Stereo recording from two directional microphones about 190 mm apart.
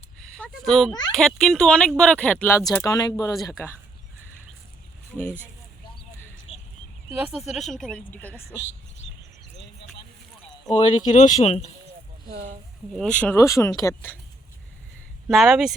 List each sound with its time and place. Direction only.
0.3 s a woman's voice: 5° left (ahead or behind); by 3.3 s 20° left (ahead or behind)
3.3 s a woman's voice: centre (ahead or behind)
5.1 s speech: 10° left (ahead or behind)
6.5 s a sound: 30° left (ahead or behind)
7.1 s a woman's voice: 5° right (ahead or behind)
10.7 s speech: 35° left (ahead or behind)
12.9 s speech: 5° left (ahead or behind)
15.3 s a woman's voice: centre (ahead or behind)